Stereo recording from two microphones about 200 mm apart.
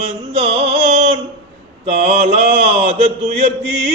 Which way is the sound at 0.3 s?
30° right (ahead or behind).